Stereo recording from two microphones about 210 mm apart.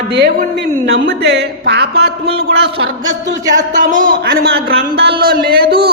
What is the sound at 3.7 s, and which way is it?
Speech, 40° right (ahead or behind).